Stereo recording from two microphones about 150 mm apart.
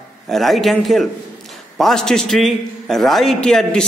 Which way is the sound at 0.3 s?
Centre (ahead or behind).